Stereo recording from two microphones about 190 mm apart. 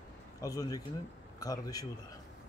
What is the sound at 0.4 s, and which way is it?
A man's voice, 20° left (ahead or behind).